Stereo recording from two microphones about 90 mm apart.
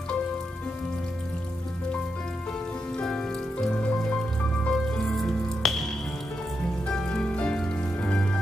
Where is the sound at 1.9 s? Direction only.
15° left (ahead or behind).